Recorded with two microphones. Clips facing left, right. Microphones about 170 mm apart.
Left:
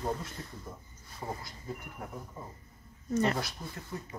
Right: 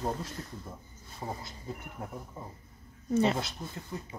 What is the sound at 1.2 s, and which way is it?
Speech, 25° right (ahead or behind).